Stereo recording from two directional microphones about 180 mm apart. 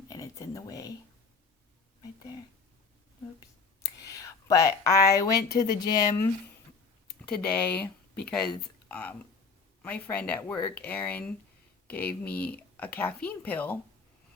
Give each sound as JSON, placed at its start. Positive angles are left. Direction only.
{"t": 0.1, "sound": "a sound", "side_deg": 20}
{"t": 3.8, "sound": "whispering", "side_deg": 20}
{"t": 5.2, "sound": "speech", "side_deg": 20}
{"t": 7.1, "sound": "speech", "side_deg": 5}